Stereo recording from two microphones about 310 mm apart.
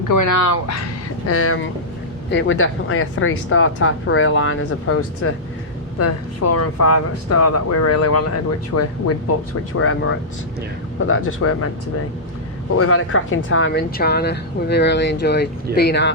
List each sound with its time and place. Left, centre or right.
0.1 s speech: left
1.3 s speech: left
11.3 s speech: left
12.7 s speech: left